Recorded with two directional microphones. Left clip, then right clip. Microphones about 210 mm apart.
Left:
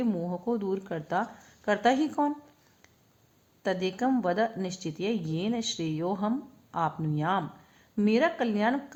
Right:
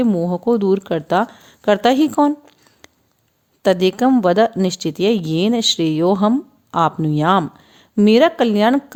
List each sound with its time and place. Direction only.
0.0 s a woman's voice: 45° right (ahead or behind)
3.6 s a woman's voice: 50° right (ahead or behind)